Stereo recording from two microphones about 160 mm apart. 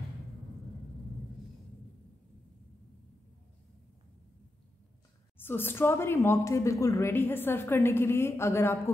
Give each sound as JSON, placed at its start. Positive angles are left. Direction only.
{"t": 5.4, "sound": "a woman's voice", "side_deg": 15}